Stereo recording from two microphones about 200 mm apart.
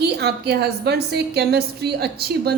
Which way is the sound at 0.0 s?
55° right (ahead or behind).